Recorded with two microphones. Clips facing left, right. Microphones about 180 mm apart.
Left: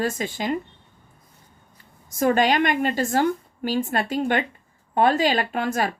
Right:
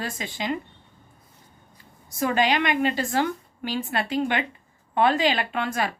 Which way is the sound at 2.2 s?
45° left (ahead or behind).